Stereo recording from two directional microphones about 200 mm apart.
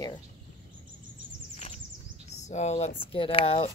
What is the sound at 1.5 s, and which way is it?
Bird, 35° left (ahead or behind).